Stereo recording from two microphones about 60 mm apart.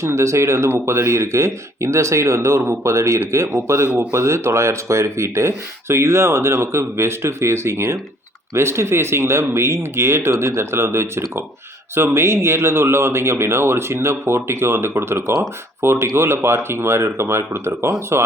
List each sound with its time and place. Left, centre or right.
0.0 s speech: right